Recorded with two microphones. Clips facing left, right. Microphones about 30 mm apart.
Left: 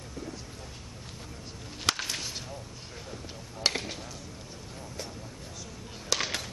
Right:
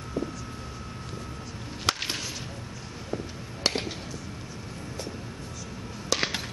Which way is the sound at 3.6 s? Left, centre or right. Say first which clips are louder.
Right 1 dB; centre.